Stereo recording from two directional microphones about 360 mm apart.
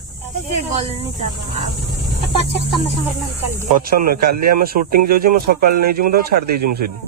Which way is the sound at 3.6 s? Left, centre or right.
Right.